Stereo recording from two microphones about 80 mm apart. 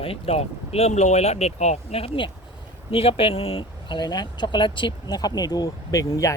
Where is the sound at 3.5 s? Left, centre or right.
Left.